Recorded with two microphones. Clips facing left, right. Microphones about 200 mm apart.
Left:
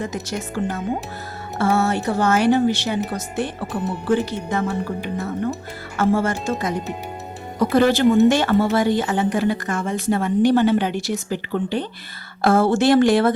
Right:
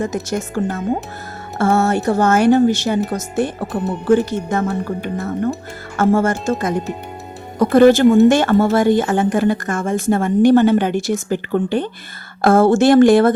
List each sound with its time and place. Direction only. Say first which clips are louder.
0.0 s speech: right 6 dB; 45° right (ahead or behind)